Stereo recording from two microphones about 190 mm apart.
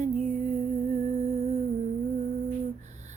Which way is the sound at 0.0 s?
40° right (ahead or behind).